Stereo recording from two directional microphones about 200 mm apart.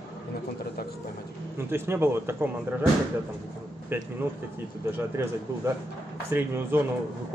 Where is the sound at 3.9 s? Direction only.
10° right (ahead or behind).